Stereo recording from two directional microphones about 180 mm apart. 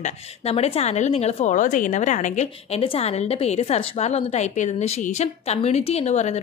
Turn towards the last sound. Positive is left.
turn(degrees=40)  # may be behind; listen again after turning